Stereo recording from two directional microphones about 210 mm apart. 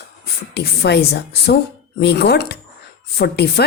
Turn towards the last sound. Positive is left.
turn(degrees=50)  # may be behind; listen again after turning